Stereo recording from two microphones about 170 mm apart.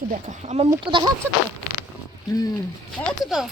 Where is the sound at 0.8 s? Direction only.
25° right (ahead or behind).